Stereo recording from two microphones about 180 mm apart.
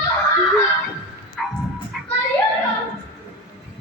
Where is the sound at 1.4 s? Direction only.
Centre (ahead or behind).